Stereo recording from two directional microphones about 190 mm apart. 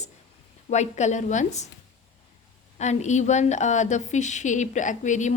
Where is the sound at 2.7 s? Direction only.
35° left (ahead or behind).